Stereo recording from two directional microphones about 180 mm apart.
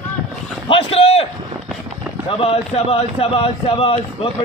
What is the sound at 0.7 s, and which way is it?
Speech, 30° left (ahead or behind).